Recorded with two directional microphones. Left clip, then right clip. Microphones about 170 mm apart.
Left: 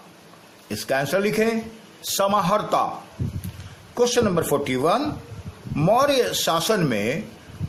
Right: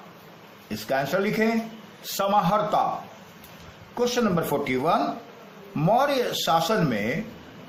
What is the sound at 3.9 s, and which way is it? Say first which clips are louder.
A man's voice: left 4 dB; 65° left (ahead or behind).